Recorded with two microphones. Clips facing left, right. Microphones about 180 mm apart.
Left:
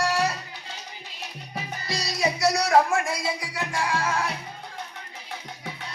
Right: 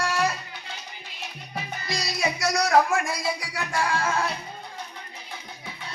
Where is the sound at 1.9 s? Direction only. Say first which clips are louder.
Left 2 dB; 35° left (ahead or behind).